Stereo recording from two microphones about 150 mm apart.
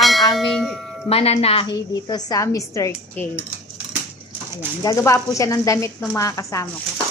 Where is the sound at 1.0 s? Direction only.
40° left (ahead or behind).